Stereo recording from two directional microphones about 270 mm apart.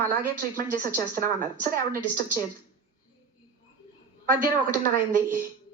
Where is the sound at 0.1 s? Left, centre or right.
Right.